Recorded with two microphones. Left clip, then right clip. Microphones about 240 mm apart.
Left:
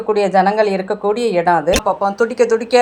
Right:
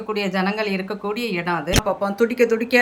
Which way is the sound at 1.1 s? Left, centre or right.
Centre.